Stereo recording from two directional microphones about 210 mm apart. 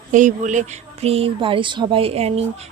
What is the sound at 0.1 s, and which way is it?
A woman's voice, 35° right (ahead or behind).